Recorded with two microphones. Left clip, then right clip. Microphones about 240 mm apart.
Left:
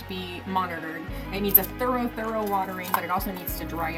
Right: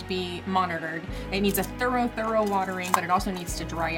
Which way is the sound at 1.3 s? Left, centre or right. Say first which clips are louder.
Right 2 dB; right.